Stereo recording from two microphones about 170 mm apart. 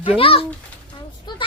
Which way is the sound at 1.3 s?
25° left (ahead or behind).